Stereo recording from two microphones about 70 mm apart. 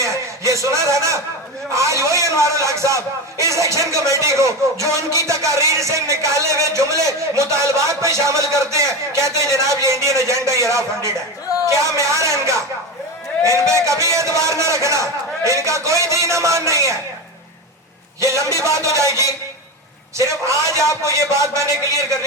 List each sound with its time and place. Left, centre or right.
0.0 s a man's voice: right
18.4 s a man's voice: right
20.1 s a man's voice: right